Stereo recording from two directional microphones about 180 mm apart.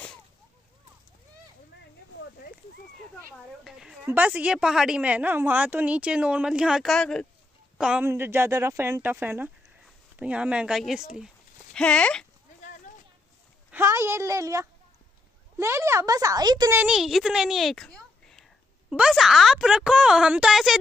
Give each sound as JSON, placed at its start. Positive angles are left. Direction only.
{"t": 3.6, "sound": "speech", "side_deg": -5}
{"t": 13.7, "sound": "speech", "side_deg": -15}
{"t": 16.7, "sound": "a child's voice", "side_deg": -5}